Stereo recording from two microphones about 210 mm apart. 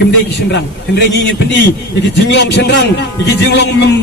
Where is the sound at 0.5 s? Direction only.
55° left (ahead or behind).